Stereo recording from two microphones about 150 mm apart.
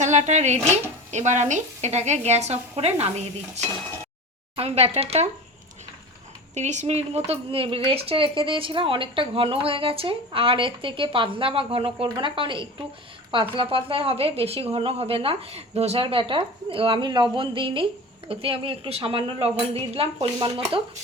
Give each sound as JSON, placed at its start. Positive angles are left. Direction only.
{"t": 0.0, "sound": "speech", "side_deg": -50}
{"t": 6.5, "sound": "speech", "side_deg": -50}